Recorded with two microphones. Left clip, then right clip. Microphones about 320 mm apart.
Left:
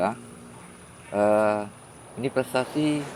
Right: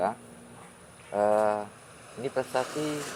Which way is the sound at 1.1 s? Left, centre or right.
Centre.